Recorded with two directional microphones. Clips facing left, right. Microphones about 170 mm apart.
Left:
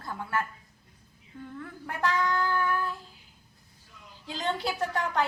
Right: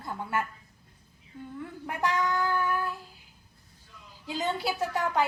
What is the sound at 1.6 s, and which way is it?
A woman's voice, 15° right (ahead or behind).